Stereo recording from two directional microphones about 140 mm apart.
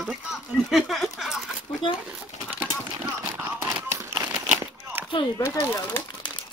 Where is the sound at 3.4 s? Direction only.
15° right (ahead or behind).